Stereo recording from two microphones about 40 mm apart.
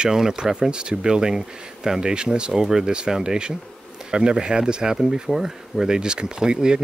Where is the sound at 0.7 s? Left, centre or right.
Right.